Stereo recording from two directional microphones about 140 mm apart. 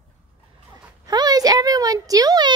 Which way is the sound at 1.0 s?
30° right (ahead or behind).